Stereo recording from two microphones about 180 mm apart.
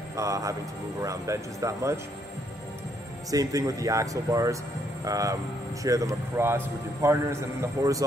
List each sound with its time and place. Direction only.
0.1 s a man's voice: 15° right (ahead or behind)
3.3 s a man's voice: 20° right (ahead or behind)